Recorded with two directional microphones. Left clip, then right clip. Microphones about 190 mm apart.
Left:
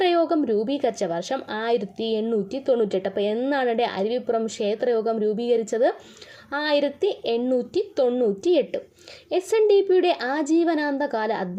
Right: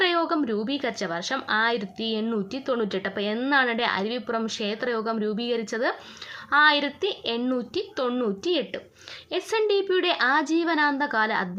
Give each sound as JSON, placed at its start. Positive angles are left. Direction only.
{"t": 0.0, "sound": "a woman's voice", "side_deg": 20}